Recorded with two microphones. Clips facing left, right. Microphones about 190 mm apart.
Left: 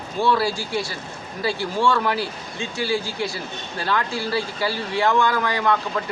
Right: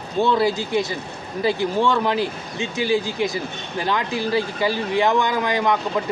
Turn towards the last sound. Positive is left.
turn(degrees=-15)  # may be behind; listen again after turning